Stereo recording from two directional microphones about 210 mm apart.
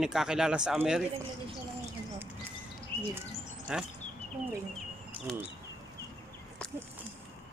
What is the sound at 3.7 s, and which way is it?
Speech, 5° right (ahead or behind).